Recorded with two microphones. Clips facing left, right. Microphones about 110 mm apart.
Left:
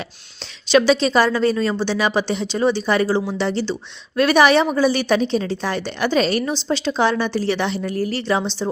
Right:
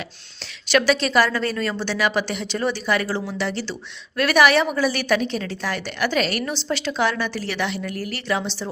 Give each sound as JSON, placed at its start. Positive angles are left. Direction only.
{"t": 0.7, "sound": "a woman's voice", "side_deg": 20}